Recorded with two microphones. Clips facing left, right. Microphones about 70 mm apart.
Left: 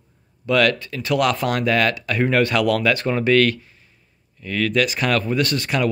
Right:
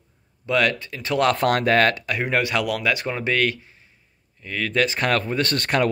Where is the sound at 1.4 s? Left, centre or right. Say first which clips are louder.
Right 2 dB; right.